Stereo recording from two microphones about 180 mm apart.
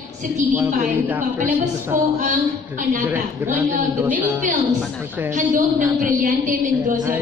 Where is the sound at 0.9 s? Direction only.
10° right (ahead or behind).